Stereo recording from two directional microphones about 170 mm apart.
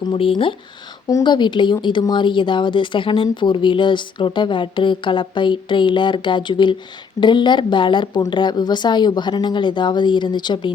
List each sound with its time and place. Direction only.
0.0 s speech: 30° left (ahead or behind)